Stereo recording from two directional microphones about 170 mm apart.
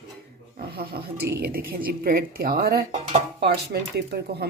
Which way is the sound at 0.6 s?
60° right (ahead or behind).